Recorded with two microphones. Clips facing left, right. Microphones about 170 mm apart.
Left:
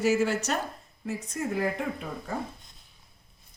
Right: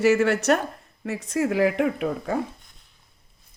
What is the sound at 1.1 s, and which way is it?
Speech, 90° right.